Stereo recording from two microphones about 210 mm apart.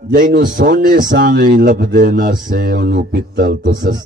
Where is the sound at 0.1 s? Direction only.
45° right (ahead or behind).